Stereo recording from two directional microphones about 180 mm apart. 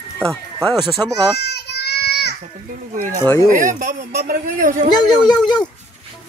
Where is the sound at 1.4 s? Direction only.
65° left (ahead or behind).